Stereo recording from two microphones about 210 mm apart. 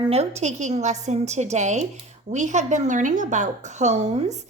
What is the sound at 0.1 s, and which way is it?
A woman's voice, 30° right (ahead or behind).